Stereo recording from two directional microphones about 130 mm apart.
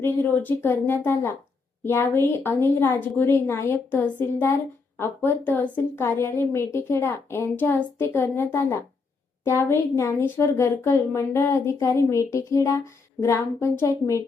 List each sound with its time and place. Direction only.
0.0 s a woman's voice: 15° left (ahead or behind)